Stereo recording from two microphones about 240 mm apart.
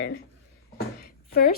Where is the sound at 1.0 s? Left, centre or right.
Left.